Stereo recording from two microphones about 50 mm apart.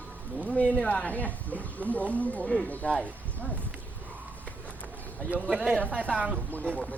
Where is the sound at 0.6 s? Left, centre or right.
Left.